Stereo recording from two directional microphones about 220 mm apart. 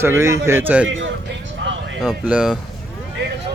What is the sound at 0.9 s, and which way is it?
Speech, 60° right (ahead or behind).